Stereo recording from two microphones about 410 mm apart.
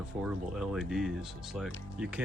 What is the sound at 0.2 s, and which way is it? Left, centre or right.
Speech, centre.